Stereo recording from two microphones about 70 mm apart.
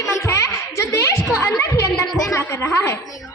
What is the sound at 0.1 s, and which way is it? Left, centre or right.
Music, left.